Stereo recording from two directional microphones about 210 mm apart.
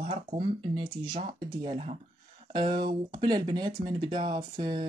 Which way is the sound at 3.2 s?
20° right (ahead or behind).